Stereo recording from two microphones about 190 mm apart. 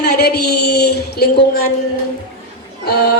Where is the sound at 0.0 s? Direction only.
55° left (ahead or behind).